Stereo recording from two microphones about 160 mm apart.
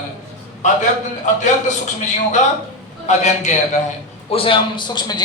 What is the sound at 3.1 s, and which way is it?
Speech, 45° left (ahead or behind).